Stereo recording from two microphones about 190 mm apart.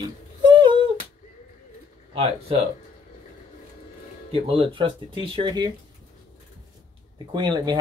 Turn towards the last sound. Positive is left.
turn(degrees=-20)  # may be behind; listen again after turning